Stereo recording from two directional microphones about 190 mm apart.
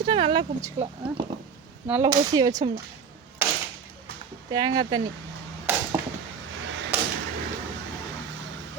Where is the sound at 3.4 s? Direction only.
10° right (ahead or behind).